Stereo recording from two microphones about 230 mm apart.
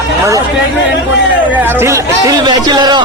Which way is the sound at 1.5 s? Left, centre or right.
Centre.